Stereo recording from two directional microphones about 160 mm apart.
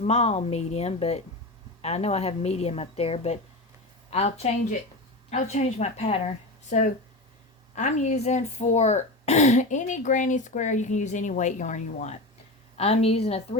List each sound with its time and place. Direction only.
0.0 s a woman's voice: 40° left (ahead or behind)
6.7 s a woman's voice: 50° left (ahead or behind)